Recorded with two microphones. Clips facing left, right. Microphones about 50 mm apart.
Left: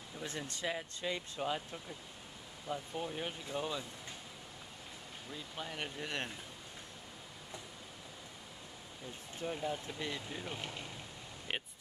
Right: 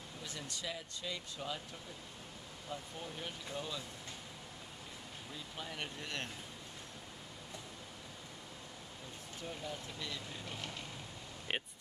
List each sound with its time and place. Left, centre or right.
0.2 s speech: left
2.7 s speech: left
5.3 s speech: centre
9.4 s speech: left